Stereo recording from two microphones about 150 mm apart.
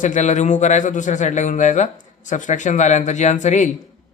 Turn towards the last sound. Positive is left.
turn(degrees=55)  # may be behind; listen again after turning